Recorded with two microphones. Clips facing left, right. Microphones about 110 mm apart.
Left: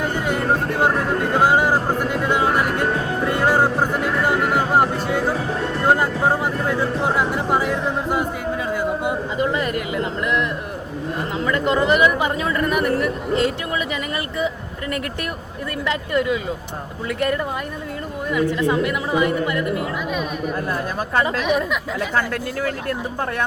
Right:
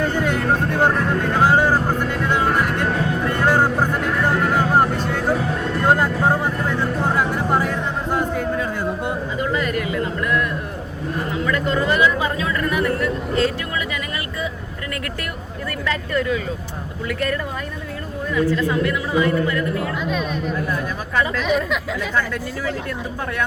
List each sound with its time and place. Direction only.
0.0 s speech: 10° left (ahead or behind)
3.2 s music: 10° left (ahead or behind)
5.9 s speech: 5° left (ahead or behind)
9.4 s speech: 20° left (ahead or behind)
15.9 s speech: 20° left (ahead or behind)
21.4 s speech: 5° left (ahead or behind)